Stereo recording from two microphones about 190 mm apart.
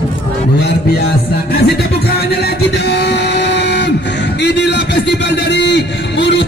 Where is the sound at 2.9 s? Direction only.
60° left (ahead or behind).